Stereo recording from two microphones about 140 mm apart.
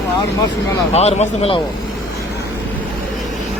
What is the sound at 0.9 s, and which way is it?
Speech, 50° left (ahead or behind).